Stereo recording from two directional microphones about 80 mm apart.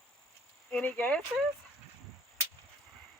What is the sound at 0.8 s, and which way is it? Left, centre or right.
Speech, left.